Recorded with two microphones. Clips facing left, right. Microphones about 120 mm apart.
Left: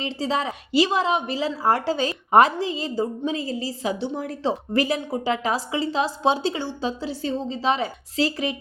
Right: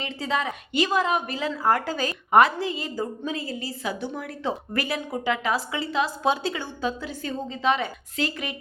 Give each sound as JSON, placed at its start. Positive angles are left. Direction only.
{"t": 0.0, "sound": "a woman's voice", "side_deg": 30}